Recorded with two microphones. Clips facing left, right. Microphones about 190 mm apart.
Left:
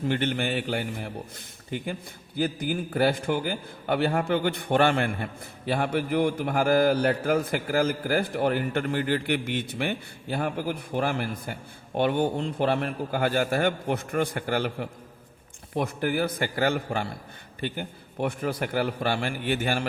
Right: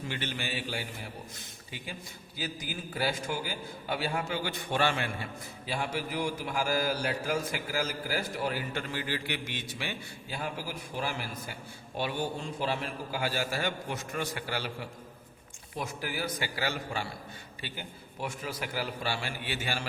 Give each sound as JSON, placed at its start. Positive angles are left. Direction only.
{"t": 0.0, "sound": "a man's voice", "side_deg": 55}